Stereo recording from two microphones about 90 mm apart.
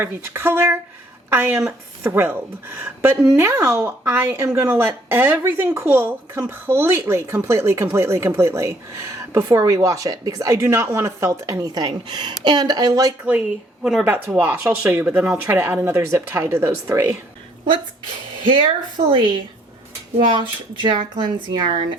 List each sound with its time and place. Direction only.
0.0 s a woman's voice: 25° right (ahead or behind); by 11.8 s 40° right (ahead or behind)
11.8 s speech: 55° right (ahead or behind)
14.0 s a woman's voice: 20° right (ahead or behind)
18.4 s speech: 65° right (ahead or behind)
20.3 s speech: 65° right (ahead or behind)